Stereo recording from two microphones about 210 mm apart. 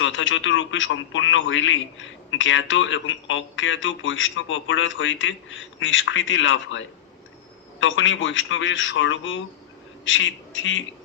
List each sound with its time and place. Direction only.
0.0 s a man's voice: 65° left (ahead or behind)